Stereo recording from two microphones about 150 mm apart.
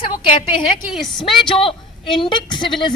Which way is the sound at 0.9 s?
Centre (ahead or behind).